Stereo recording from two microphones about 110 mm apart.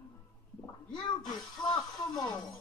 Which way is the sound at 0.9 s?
40° left (ahead or behind).